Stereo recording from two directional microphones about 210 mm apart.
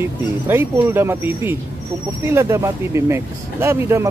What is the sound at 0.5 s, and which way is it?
Speech, 10° right (ahead or behind).